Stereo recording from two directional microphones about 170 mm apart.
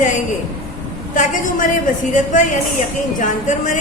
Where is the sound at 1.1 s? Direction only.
50° left (ahead or behind).